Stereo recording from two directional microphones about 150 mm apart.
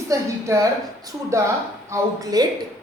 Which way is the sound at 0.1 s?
20° right (ahead or behind).